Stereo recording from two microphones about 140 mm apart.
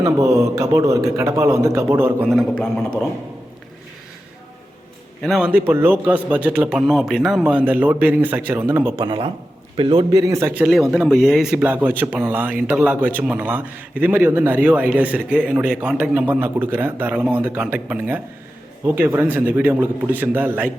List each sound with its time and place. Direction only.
0.0 s a man's voice: 25° right (ahead or behind)
2.6 s speech: 5° left (ahead or behind)
5.2 s speech: centre (ahead or behind)
5.5 s a man's voice: 15° right (ahead or behind)
9.0 s a man's voice: 35° right (ahead or behind); by 10.7 s 15° right (ahead or behind)
10.7 s a man's voice: centre (ahead or behind)